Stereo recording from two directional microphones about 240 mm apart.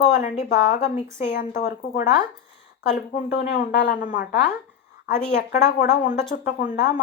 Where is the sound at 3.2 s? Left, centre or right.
Left.